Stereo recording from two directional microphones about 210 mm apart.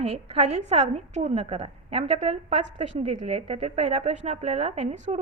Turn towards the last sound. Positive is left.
turn(degrees=-30)  # may be behind; listen again after turning